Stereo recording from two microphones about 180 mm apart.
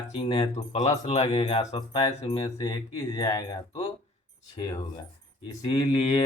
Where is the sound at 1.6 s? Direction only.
20° left (ahead or behind).